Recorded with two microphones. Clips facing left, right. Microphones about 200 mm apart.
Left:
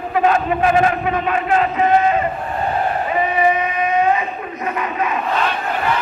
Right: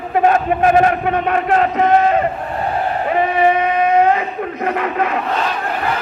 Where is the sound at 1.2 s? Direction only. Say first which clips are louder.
Right 2 dB; 55° right (ahead or behind).